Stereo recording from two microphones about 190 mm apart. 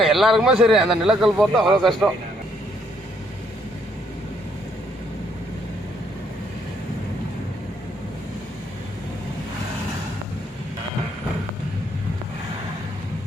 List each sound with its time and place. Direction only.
0.0 s speech: centre (ahead or behind)